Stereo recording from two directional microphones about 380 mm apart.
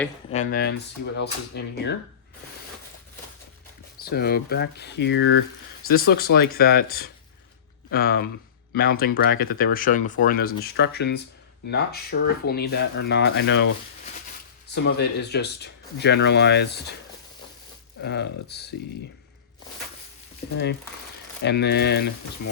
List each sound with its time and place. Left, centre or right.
0.3 s speech: left
3.9 s speech: left
14.8 s speech: left
18.0 s speech: left
21.4 s speech: left